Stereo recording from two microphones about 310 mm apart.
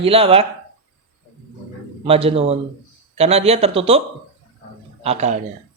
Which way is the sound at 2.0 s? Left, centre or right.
Centre.